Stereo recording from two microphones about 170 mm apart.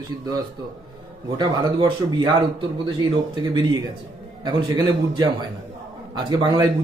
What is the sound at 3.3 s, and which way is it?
A man's voice, 25° right (ahead or behind).